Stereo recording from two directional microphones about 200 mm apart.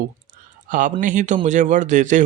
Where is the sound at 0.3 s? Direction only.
40° right (ahead or behind).